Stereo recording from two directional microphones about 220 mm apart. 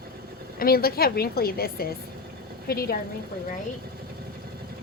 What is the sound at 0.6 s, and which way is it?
A woman's voice, 45° left (ahead or behind).